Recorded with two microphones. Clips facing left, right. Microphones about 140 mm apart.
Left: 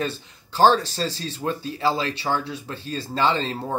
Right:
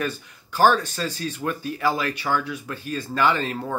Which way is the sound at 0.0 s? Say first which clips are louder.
Even; 25° left (ahead or behind).